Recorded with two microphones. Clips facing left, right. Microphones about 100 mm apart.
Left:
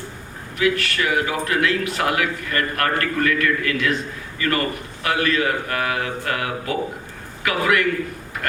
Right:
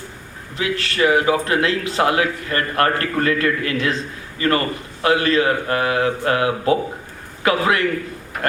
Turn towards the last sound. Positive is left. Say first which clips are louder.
# right 2 dB
turn(degrees=-30)  # may be behind; listen again after turning